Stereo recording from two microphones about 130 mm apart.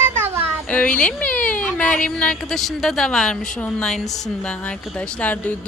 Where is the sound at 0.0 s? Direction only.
15° right (ahead or behind).